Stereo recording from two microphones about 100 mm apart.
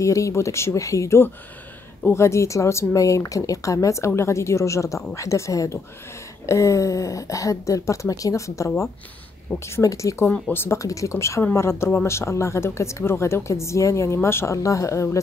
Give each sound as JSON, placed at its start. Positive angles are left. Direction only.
{"t": 0.0, "sound": "speech", "side_deg": 30}